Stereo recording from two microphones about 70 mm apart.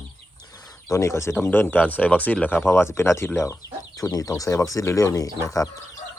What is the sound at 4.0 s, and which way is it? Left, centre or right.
Speech, left.